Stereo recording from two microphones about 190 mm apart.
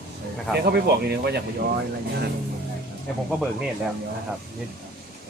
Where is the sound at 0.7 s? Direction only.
60° right (ahead or behind).